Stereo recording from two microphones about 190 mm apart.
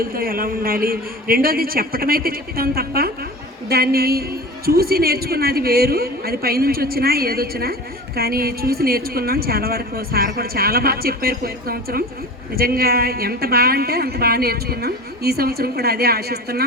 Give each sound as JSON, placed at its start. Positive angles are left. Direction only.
{"t": 0.0, "sound": "a woman's voice", "side_deg": -50}